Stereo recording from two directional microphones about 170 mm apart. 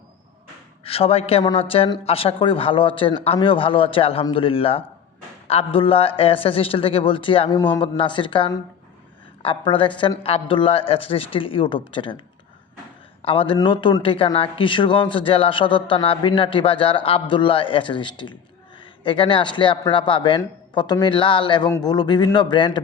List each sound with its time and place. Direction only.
0.9 s a man's voice: 35° left (ahead or behind)
13.2 s a man's voice: 35° left (ahead or behind)